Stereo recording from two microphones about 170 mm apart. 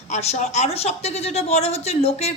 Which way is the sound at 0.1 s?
40° left (ahead or behind).